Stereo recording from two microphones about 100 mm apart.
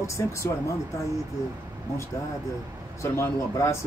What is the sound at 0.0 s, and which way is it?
Speech, 30° left (ahead or behind).